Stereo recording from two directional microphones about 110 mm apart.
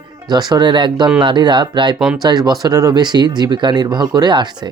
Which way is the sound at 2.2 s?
40° right (ahead or behind).